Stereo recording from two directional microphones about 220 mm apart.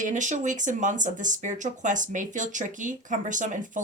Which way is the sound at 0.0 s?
35° right (ahead or behind).